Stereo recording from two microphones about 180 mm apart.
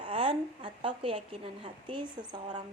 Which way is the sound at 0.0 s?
30° right (ahead or behind).